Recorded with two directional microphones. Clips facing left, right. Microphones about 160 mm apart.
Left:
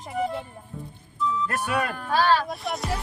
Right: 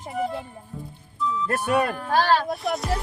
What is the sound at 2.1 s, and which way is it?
Speech, 55° right (ahead or behind).